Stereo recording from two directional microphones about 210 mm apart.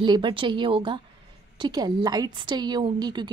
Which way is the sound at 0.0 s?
25° right (ahead or behind).